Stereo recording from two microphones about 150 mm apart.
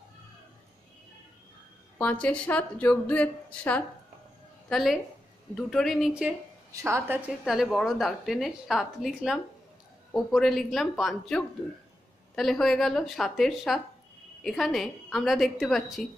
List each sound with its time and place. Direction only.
2.0 s a woman's voice: 10° left (ahead or behind)
6.7 s a woman's voice: 20° right (ahead or behind)
7.4 s a woman's voice: centre (ahead or behind)